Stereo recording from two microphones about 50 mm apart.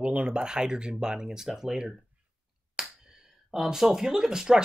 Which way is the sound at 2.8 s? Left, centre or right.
Centre.